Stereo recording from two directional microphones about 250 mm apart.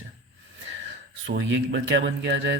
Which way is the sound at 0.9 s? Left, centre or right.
Right.